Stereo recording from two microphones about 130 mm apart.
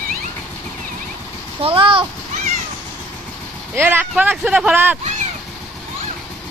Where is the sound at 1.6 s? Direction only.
45° right (ahead or behind).